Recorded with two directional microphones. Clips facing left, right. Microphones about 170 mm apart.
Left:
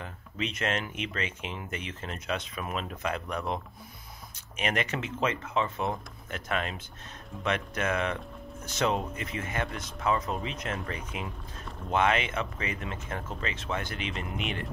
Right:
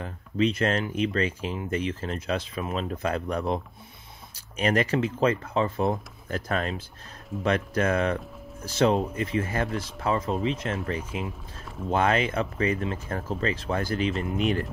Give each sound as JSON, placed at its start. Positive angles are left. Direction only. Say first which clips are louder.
{"t": 0.0, "sound": "speech", "louder": "right 10 dB", "side_deg": -35}